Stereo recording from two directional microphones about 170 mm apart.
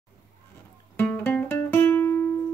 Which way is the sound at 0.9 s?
10° left (ahead or behind).